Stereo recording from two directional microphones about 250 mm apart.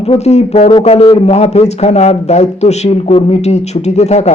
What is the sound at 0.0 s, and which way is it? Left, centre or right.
A man's voice, left.